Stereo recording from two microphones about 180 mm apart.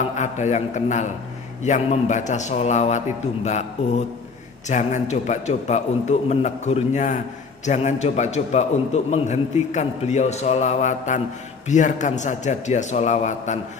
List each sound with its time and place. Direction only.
0.1 s a man's voice: 40° left (ahead or behind)
4.6 s a man's voice: 40° left (ahead or behind)